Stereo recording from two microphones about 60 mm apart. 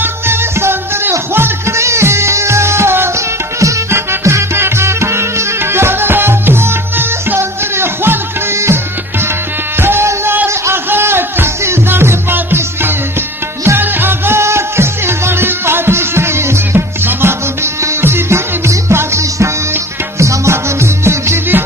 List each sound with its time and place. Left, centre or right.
0.0 s music: right
3.5 s music: right
9.8 s music: right